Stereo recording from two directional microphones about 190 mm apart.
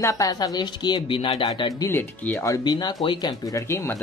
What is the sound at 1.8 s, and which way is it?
Speech, 10° left (ahead or behind).